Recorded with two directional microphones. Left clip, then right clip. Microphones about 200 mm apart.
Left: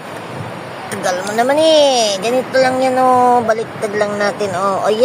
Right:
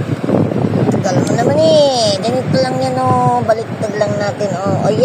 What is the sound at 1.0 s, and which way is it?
Speech, 20° left (ahead or behind).